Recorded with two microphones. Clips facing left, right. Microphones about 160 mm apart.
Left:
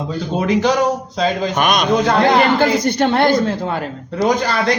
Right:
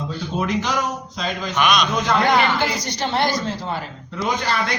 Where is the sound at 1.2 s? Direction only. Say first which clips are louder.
Left 5 dB; 45° left (ahead or behind).